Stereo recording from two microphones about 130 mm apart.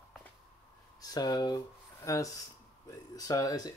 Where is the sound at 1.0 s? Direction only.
30° left (ahead or behind).